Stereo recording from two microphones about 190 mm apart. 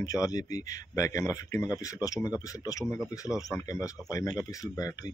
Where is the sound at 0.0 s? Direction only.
20° left (ahead or behind).